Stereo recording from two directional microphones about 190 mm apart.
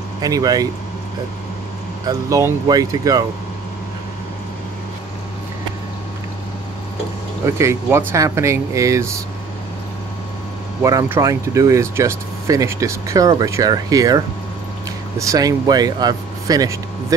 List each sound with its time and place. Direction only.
0.2 s speech: 20° right (ahead or behind)
2.0 s speech: 15° right (ahead or behind)
7.5 s speech: 15° right (ahead or behind)
10.8 s speech: 15° right (ahead or behind)